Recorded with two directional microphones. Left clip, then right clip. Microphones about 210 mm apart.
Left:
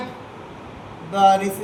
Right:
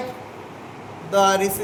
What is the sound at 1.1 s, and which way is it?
Speech, 45° right (ahead or behind).